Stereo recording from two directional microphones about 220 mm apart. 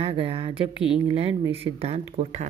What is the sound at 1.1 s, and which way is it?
A woman's voice, 25° right (ahead or behind).